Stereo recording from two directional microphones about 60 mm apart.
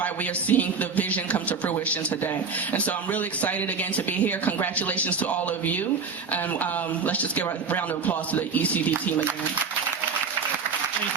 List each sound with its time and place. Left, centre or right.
0.0 s speech: left